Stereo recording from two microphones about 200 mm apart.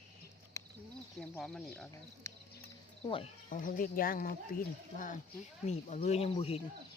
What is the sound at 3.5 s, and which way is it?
Speech, 45° left (ahead or behind).